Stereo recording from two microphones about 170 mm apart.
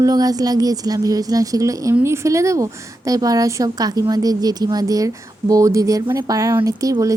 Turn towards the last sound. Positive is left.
turn(degrees=-20)  # may be behind; listen again after turning